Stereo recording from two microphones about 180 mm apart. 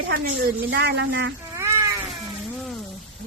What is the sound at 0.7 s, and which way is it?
Speech, 70° right (ahead or behind).